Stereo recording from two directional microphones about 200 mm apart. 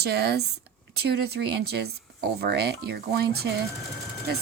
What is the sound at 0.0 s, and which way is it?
Speech, 55° right (ahead or behind).